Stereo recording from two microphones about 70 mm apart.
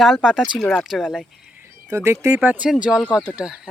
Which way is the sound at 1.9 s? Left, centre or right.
Right.